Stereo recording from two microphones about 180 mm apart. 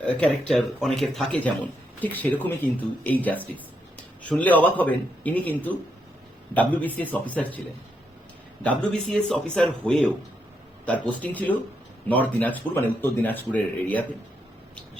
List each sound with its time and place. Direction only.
0.0 s speech: 5° left (ahead or behind)
8.6 s speech: 5° left (ahead or behind)
11.2 s speech: 10° left (ahead or behind)